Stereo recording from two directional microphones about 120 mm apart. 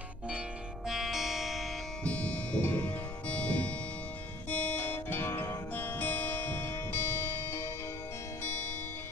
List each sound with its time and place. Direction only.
0.8 s music: centre (ahead or behind)
2.0 s music: 10° left (ahead or behind)